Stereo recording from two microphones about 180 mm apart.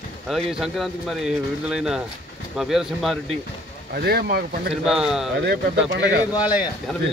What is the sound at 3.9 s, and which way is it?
Speech, 60° right (ahead or behind).